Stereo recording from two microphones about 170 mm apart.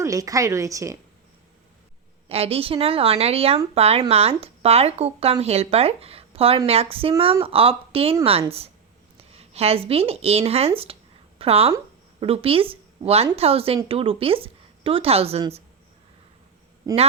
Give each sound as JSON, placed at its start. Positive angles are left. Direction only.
{"t": 0.0, "sound": "speech", "side_deg": -20}
{"t": 2.3, "sound": "speech", "side_deg": -35}
{"t": 10.9, "sound": "a sound", "side_deg": -35}
{"t": 11.3, "sound": "speech", "side_deg": -35}
{"t": 16.9, "sound": "speech", "side_deg": -20}